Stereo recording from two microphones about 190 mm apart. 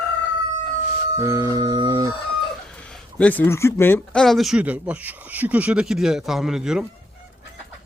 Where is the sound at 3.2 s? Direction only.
10° left (ahead or behind).